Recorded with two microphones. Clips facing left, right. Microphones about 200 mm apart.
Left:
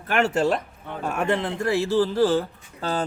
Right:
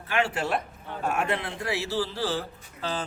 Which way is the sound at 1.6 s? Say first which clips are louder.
Left 11 dB; 50° left (ahead or behind).